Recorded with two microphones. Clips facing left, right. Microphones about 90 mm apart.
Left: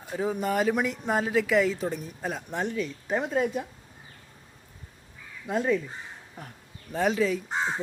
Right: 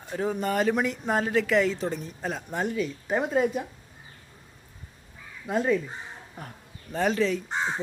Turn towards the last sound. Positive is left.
turn(degrees=0)  # may be behind; listen again after turning